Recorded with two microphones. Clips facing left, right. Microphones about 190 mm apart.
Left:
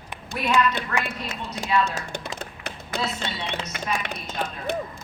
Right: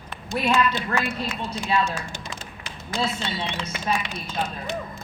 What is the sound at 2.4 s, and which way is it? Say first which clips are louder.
Tap: left 4 dB; 60° left (ahead or behind).